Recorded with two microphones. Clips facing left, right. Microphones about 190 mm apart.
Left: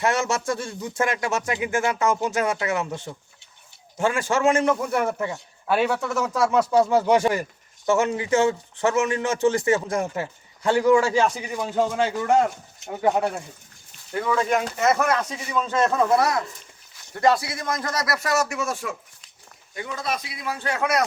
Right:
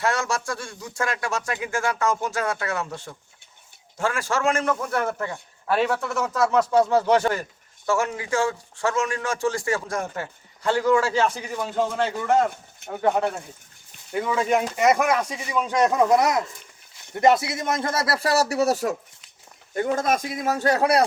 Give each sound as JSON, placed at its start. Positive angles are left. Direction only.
{"t": 0.0, "sound": "a man's voice", "side_deg": 20}
{"t": 14.1, "sound": "a man's voice", "side_deg": -15}